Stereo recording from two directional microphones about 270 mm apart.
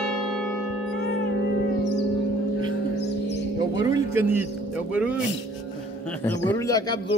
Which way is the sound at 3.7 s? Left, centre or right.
Centre.